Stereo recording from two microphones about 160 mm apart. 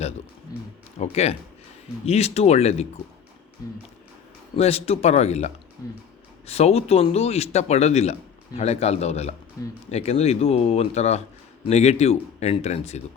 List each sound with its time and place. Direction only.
0.9 s speech: 40° left (ahead or behind)
4.5 s speech: 40° left (ahead or behind)
5.8 s speech: 20° left (ahead or behind)
6.5 s speech: 40° left (ahead or behind)
9.6 s speech: 20° left (ahead or behind)
9.9 s speech: 40° left (ahead or behind)